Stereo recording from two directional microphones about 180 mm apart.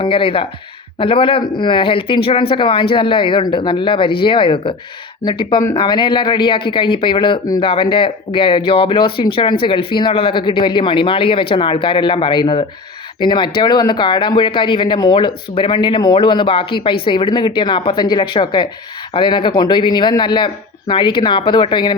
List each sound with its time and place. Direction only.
0.0 s speech: 30° left (ahead or behind)